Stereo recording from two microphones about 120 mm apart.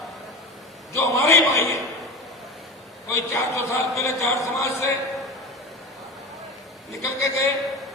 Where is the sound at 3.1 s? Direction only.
25° left (ahead or behind).